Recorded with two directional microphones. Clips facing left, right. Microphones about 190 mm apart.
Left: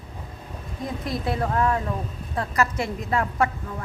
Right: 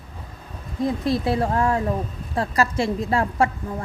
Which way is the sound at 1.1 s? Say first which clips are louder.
Right 2 dB; 30° right (ahead or behind).